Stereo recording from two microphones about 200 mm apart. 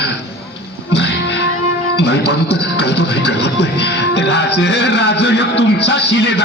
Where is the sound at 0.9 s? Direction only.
60° left (ahead or behind).